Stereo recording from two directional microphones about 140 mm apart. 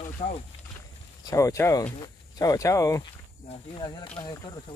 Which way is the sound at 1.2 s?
25° left (ahead or behind).